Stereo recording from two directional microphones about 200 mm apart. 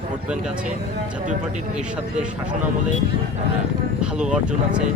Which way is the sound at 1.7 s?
5° right (ahead or behind).